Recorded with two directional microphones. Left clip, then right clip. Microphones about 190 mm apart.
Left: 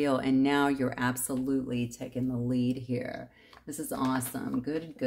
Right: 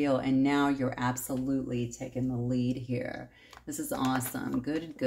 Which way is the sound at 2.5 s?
25° left (ahead or behind).